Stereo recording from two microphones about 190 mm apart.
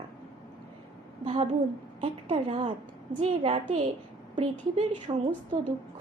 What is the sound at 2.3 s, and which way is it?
A woman's voice, 25° right (ahead or behind).